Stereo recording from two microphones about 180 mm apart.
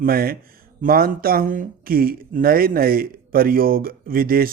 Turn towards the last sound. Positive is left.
turn(degrees=-55)  # may be behind; listen again after turning